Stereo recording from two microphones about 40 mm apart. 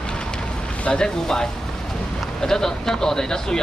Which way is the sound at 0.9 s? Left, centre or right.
Centre.